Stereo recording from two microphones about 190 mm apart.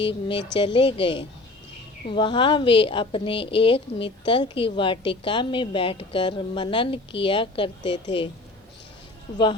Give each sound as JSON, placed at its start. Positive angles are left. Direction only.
{"t": 0.0, "sound": "a woman's voice", "side_deg": 25}
{"t": 9.3, "sound": "a woman's voice", "side_deg": 20}